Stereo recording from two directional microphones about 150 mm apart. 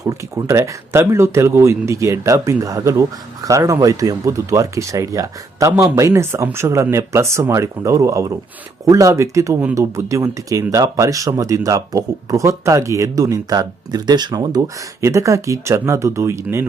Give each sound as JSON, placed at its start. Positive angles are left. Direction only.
{"t": 0.0, "sound": "speech", "side_deg": -20}